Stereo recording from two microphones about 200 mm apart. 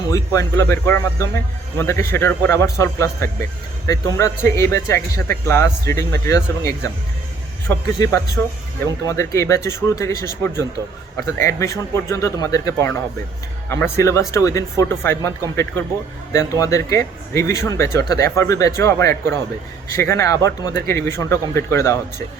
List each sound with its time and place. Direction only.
0.1 s speech: 15° left (ahead or behind)